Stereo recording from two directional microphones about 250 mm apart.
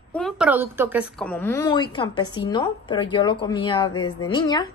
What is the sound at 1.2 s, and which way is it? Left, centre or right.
A woman's voice, centre.